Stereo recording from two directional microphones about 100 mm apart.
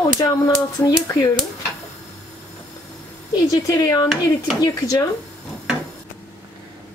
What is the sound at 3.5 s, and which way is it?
Speech, 35° left (ahead or behind).